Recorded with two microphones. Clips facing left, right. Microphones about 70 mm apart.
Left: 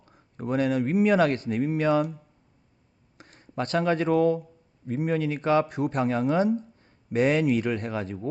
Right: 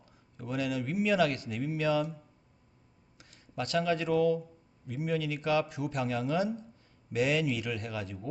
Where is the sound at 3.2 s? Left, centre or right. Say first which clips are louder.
Left 6 dB; left.